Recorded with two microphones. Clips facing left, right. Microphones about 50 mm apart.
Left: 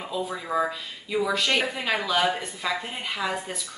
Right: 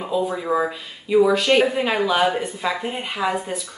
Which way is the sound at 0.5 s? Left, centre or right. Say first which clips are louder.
Right 4 dB; centre.